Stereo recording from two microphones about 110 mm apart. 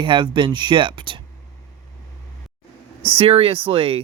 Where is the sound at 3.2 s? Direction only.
60° right (ahead or behind).